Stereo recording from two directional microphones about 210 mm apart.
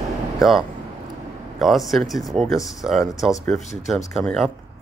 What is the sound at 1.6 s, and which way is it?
Speech, centre (ahead or behind).